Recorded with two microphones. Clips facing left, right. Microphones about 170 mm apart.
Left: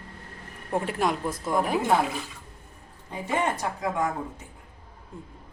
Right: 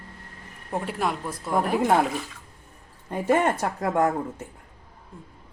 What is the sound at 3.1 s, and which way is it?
Speech, 55° right (ahead or behind).